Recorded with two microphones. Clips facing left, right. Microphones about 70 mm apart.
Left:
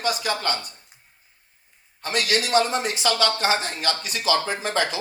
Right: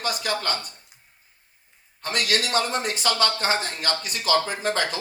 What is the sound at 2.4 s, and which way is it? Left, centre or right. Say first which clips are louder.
Speech: left 3 dB; right.